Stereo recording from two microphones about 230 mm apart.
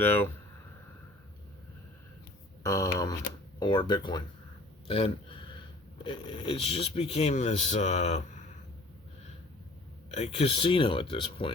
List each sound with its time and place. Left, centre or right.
0.0 s speech: centre
2.6 s a man's voice: centre; by 8.4 s left
10.2 s speech: left